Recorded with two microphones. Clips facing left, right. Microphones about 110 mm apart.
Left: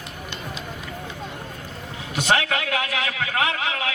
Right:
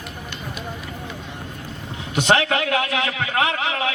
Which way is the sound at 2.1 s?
25° right (ahead or behind).